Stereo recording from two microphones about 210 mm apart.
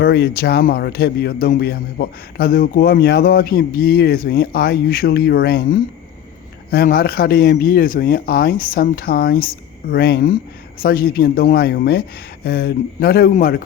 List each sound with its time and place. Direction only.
0.0 s speech: 50° left (ahead or behind)